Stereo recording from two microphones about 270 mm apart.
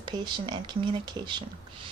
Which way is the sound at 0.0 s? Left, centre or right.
Centre.